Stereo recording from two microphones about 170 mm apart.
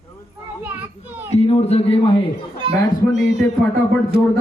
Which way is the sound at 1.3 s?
40° left (ahead or behind).